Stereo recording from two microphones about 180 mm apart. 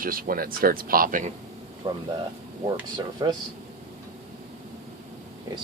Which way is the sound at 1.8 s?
25° right (ahead or behind).